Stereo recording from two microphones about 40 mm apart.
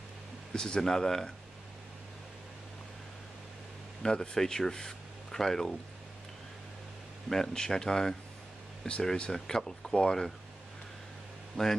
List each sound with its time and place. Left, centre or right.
0.5 s speech: centre
4.0 s speech: centre
7.2 s speech: centre
11.6 s speech: centre